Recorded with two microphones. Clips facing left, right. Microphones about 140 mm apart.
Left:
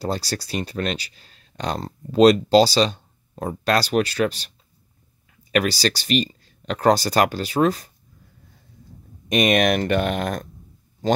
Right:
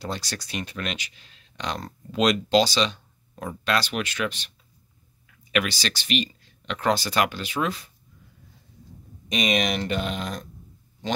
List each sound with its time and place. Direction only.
0.0 s speech: 35° left (ahead or behind)
9.3 s speech: 55° left (ahead or behind)